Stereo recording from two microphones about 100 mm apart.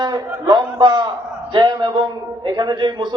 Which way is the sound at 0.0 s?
40° right (ahead or behind).